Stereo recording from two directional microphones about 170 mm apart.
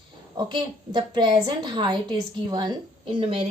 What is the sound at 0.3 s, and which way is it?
A woman's voice, 30° right (ahead or behind).